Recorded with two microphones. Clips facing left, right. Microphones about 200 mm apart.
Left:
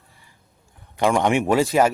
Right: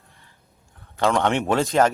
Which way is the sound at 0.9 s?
15° left (ahead or behind).